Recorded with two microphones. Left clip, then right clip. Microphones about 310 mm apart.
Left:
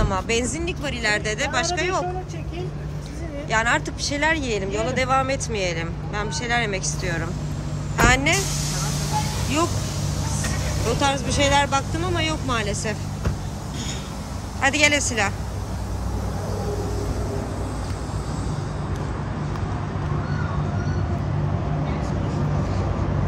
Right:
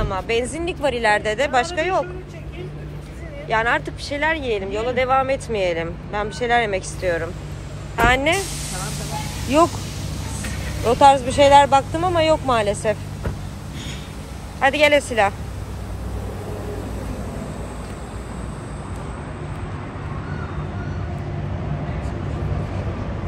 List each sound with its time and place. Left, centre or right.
0.0 s speech: centre
0.7 s speech: centre
3.4 s speech: centre
11.0 s speech: centre
14.6 s speech: centre